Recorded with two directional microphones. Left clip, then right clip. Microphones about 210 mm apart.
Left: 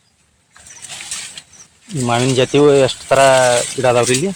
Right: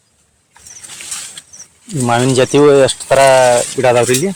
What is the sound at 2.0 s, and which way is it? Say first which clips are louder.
Speech: right 3 dB; 25° right (ahead or behind).